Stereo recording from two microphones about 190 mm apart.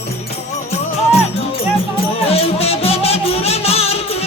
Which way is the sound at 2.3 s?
30° left (ahead or behind).